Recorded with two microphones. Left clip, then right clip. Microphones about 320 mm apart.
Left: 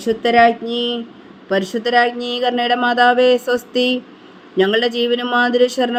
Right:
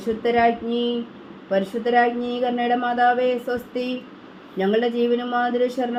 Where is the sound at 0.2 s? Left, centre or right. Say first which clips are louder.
Left 7 dB; left.